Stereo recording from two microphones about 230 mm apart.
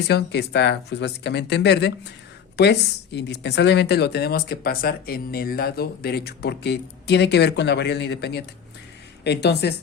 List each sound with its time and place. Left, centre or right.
0.1 s speech: left